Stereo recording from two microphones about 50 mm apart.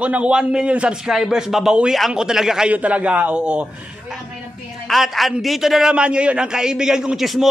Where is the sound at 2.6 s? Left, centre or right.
Right.